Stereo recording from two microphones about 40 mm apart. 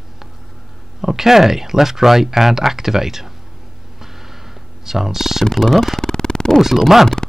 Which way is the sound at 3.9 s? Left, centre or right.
Centre.